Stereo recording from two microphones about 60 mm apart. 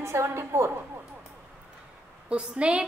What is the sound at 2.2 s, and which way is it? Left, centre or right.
Speech, centre.